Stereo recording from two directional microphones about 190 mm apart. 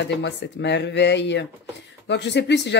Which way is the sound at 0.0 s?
65° left (ahead or behind).